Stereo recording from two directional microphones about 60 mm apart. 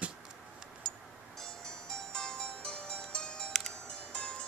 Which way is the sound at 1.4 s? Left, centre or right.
Centre.